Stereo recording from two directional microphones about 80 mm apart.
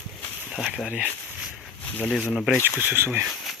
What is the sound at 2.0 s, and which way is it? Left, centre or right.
Speech, centre.